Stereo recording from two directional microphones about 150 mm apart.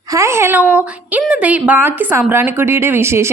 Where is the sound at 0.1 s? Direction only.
20° right (ahead or behind).